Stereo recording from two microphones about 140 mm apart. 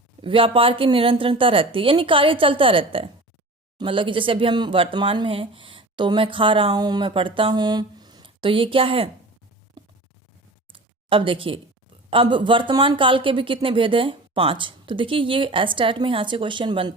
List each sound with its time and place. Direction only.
0.2 s speech: 40° right (ahead or behind)
10.7 s a sound: 40° right (ahead or behind)
12.1 s speech: 35° right (ahead or behind)